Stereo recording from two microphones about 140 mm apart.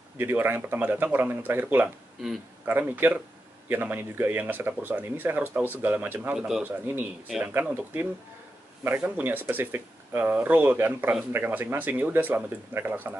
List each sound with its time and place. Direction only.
0.2 s speech: 15° right (ahead or behind)